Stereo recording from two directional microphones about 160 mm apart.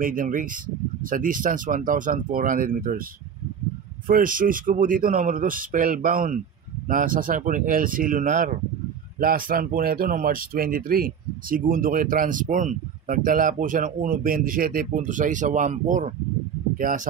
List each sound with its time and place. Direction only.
0.0 s speech: 60° right (ahead or behind)
4.1 s speech: 60° right (ahead or behind)